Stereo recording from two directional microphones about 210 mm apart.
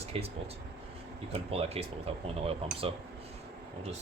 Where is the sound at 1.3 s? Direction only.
30° right (ahead or behind).